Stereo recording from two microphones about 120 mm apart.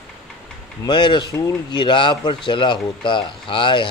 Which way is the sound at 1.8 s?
40° left (ahead or behind).